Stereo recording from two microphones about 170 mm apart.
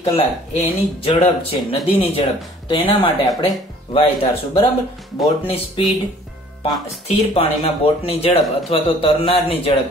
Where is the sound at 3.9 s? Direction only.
35° left (ahead or behind).